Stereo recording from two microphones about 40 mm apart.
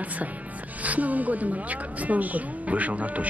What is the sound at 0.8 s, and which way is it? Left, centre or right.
Speech, right.